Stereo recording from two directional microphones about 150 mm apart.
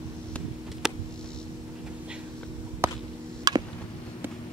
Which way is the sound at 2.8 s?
15° right (ahead or behind).